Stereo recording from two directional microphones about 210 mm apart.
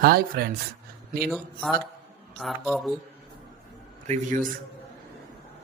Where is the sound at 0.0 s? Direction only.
45° right (ahead or behind).